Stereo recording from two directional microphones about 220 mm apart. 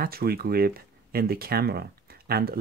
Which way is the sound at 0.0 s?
45° right (ahead or behind).